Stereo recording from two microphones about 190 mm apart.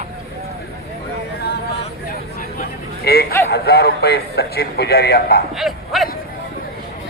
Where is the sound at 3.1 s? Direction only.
55° left (ahead or behind).